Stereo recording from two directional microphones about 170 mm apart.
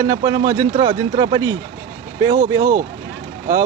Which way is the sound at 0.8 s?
30° right (ahead or behind).